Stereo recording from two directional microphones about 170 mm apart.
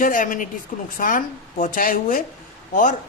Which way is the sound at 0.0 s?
50° left (ahead or behind).